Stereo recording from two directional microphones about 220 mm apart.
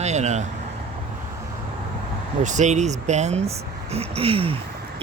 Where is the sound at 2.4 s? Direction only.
35° right (ahead or behind).